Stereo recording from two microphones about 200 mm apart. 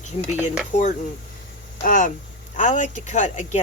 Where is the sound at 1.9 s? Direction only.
40° left (ahead or behind).